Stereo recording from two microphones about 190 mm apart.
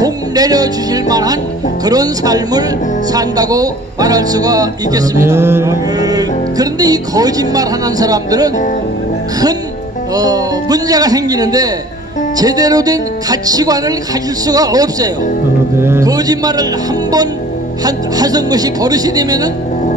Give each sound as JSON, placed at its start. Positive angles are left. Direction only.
{"t": 0.0, "sound": "speech", "side_deg": -20}
{"t": 10.1, "sound": "a man's voice", "side_deg": -20}
{"t": 17.8, "sound": "speech", "side_deg": -20}